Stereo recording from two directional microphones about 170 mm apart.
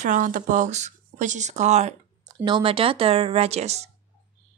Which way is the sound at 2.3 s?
25° right (ahead or behind).